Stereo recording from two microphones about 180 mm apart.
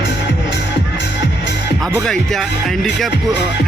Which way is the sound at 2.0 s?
Centre (ahead or behind).